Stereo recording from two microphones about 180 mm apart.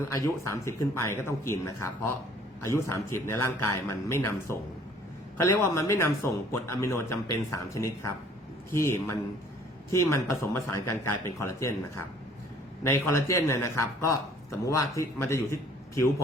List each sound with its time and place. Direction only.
0.1 s a man's voice: 15° left (ahead or behind)